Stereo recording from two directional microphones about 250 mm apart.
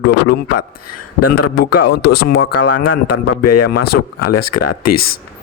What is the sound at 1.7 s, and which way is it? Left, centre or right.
Speech, left.